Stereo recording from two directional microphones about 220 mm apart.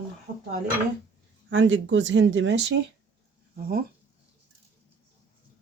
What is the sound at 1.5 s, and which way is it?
Speech, 60° right (ahead or behind).